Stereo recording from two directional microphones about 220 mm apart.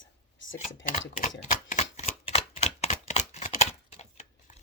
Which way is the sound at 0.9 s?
35° left (ahead or behind).